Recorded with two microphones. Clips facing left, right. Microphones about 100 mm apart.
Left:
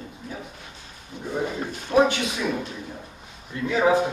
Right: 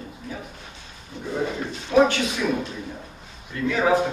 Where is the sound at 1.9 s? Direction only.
25° left (ahead or behind).